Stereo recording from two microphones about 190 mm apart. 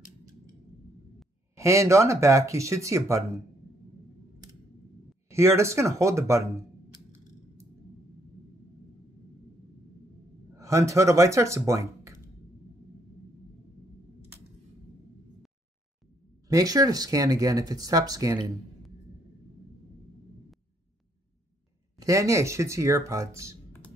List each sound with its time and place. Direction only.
1.5 s speech: 15° right (ahead or behind)
5.3 s speech: 15° right (ahead or behind)
10.5 s speech: 15° right (ahead or behind)
16.4 s speech: 20° right (ahead or behind)
21.9 s speech: 15° right (ahead or behind)